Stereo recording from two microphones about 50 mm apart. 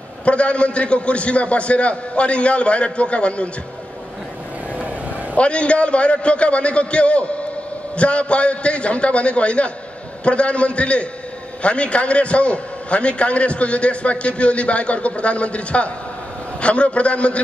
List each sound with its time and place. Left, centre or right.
0.2 s a man's voice: left
5.3 s a man's voice: left